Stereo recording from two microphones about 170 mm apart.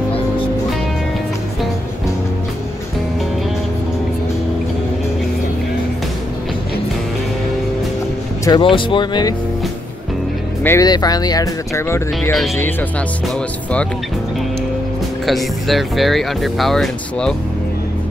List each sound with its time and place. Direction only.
8.5 s speech: 30° left (ahead or behind)
10.6 s speech: 15° left (ahead or behind)
12.2 s speech: centre (ahead or behind)
15.2 s speech: centre (ahead or behind)